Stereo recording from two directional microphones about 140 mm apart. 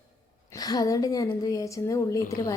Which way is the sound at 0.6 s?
25° left (ahead or behind).